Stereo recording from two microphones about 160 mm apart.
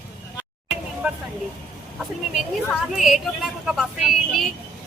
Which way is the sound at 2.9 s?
5° right (ahead or behind).